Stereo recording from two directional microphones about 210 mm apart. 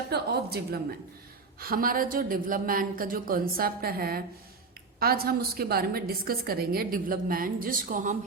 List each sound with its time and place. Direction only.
0.1 s a woman's voice: 50° right (ahead or behind)